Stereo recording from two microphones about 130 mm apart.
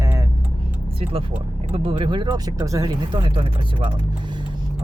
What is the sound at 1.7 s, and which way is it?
Speech, 45° right (ahead or behind).